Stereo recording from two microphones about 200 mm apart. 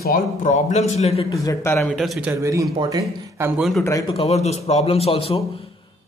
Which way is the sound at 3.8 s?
15° left (ahead or behind).